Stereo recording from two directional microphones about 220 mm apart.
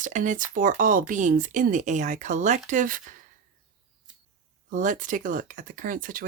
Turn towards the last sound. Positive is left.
turn(degrees=-40)  # may be behind; listen again after turning